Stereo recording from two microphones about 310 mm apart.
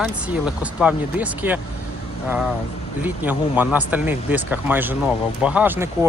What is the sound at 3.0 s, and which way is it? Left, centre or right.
Speech, centre.